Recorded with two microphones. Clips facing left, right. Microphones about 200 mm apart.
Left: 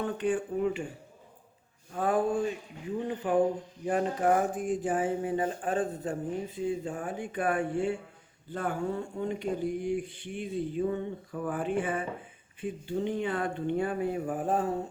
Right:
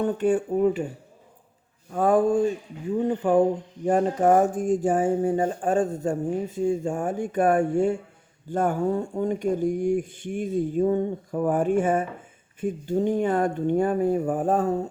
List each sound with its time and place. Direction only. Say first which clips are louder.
0.0 s speech: right 7 dB; 40° right (ahead or behind)
1.9 s speech: right 7 dB; 45° right (ahead or behind)